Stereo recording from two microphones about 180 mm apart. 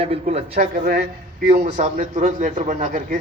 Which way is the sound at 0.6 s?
50° right (ahead or behind).